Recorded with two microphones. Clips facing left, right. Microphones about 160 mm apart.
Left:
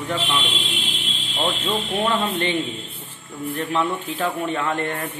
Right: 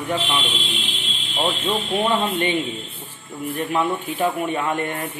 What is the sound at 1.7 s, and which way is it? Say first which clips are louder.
Speech: right 2 dB; 15° right (ahead or behind).